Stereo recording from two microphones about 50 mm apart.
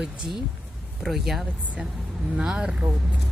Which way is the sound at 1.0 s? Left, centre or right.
Centre.